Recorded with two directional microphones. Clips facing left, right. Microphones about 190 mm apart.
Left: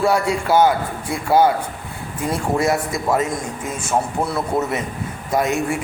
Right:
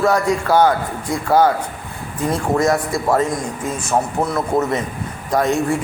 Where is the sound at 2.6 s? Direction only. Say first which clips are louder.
Right 2 dB; 20° left (ahead or behind).